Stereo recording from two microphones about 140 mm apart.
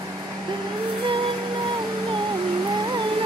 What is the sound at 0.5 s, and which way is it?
Vehicle, 40° right (ahead or behind).